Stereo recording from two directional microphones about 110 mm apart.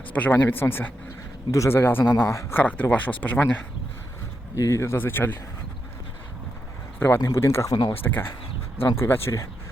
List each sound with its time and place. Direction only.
0.1 s speech: 15° left (ahead or behind)
4.5 s speech: 30° left (ahead or behind)
7.2 s speech: 25° left (ahead or behind)
7.8 s speech: 45° left (ahead or behind)
8.0 s speech: 20° left (ahead or behind)